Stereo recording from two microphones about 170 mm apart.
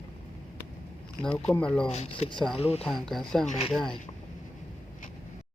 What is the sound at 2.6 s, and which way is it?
Speech, 35° left (ahead or behind).